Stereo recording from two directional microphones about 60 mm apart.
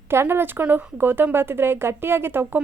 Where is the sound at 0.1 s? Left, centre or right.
Right.